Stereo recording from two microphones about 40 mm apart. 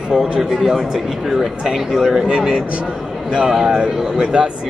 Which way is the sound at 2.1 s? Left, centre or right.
Centre.